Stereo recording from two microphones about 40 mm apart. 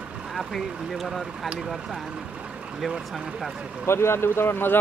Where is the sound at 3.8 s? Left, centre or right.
Left.